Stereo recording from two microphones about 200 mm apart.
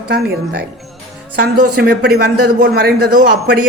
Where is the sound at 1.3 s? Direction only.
50° right (ahead or behind).